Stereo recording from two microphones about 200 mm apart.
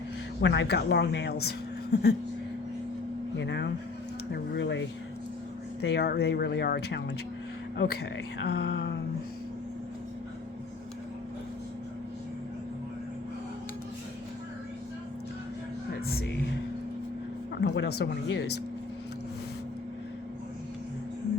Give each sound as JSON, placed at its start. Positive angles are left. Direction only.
{"t": 0.4, "sound": "speech", "side_deg": 60}
{"t": 3.3, "sound": "speech", "side_deg": 60}
{"t": 8.4, "sound": "speech", "side_deg": 55}
{"t": 16.0, "sound": "music", "side_deg": 55}
{"t": 17.6, "sound": "speech", "side_deg": 55}